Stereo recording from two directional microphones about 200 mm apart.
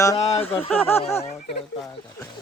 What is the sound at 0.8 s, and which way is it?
Speech, 10° left (ahead or behind).